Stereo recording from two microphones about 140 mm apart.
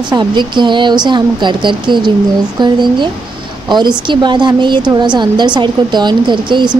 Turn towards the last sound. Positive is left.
turn(degrees=-35)  # may be behind; listen again after turning